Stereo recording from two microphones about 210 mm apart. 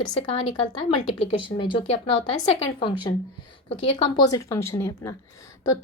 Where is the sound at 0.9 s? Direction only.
25° left (ahead or behind).